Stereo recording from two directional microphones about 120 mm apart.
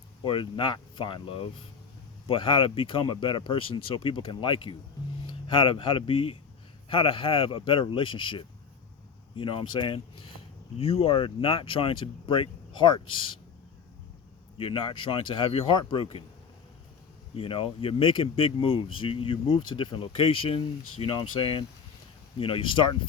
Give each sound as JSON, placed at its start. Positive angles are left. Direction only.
{"t": 0.3, "sound": "speech", "side_deg": 45}
{"t": 14.6, "sound": "speech", "side_deg": 45}
{"t": 17.3, "sound": "speech", "side_deg": 50}